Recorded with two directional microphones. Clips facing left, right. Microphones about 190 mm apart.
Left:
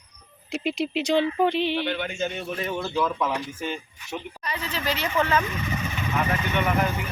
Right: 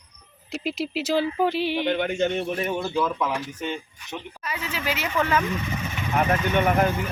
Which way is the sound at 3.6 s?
5° left (ahead or behind).